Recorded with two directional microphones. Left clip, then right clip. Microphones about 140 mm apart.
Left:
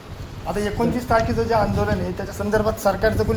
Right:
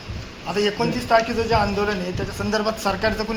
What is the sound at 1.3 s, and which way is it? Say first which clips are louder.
Speech: even; 90° left.